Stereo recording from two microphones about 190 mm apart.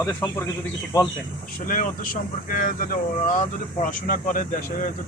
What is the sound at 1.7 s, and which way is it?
Speech, 45° left (ahead or behind).